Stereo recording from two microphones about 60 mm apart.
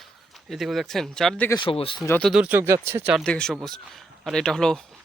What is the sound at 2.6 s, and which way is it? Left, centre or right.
Speech, right.